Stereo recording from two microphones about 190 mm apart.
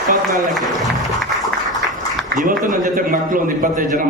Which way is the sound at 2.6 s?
45° right (ahead or behind).